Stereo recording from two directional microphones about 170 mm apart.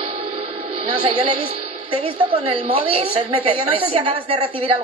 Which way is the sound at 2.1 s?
30° right (ahead or behind).